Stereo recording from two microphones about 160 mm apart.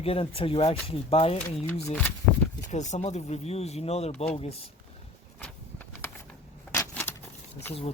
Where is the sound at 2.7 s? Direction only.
45° left (ahead or behind).